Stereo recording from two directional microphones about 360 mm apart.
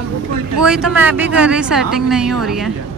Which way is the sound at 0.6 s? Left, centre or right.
Centre.